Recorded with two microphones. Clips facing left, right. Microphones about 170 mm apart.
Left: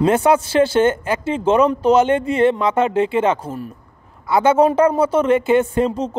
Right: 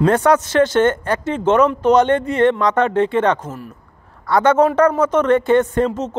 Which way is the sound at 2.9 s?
10° left (ahead or behind).